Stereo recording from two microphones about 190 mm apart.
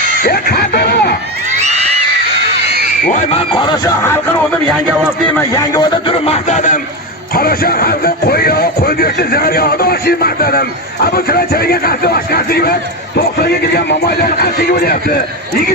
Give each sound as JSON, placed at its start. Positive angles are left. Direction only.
{"t": 0.2, "sound": "music", "side_deg": 55}
{"t": 3.0, "sound": "speech", "side_deg": 40}
{"t": 5.4, "sound": "speech", "side_deg": 20}
{"t": 6.2, "sound": "speech", "side_deg": 35}
{"t": 7.3, "sound": "a man's voice", "side_deg": 50}